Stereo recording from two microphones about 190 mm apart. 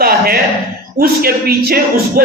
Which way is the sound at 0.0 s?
50° right (ahead or behind).